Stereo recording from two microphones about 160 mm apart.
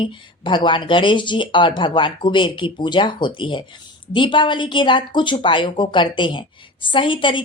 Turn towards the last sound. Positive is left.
turn(degrees=30)  # may be behind; listen again after turning